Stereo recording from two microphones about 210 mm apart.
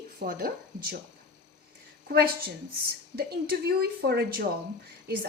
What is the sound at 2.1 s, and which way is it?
Speech, 45° right (ahead or behind).